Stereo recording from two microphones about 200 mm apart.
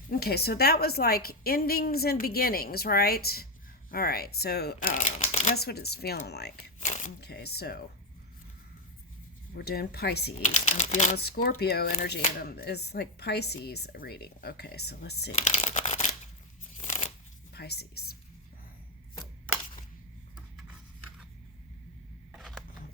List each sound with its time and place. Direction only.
0.1 s a woman's voice: 50° left (ahead or behind)
4.9 s a woman's voice: 40° left (ahead or behind)
6.7 s a sound: 35° left (ahead or behind)
7.2 s a woman's voice: 55° left (ahead or behind)
9.6 s a woman's voice: 50° left (ahead or behind)
10.5 s speech: 35° left (ahead or behind)
11.2 s a woman's voice: 50° left (ahead or behind)
15.3 s crumpling: 35° left (ahead or behind)
16.7 s a sound: 35° left (ahead or behind)
17.5 s speech: 55° left (ahead or behind)
22.3 s a sound: centre (ahead or behind)